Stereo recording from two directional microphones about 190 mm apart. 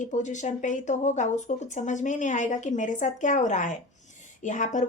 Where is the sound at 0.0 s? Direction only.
40° left (ahead or behind).